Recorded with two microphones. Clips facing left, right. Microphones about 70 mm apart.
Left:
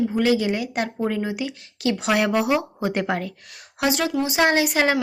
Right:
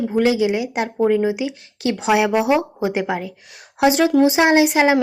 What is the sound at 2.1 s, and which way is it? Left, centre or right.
Speech, centre.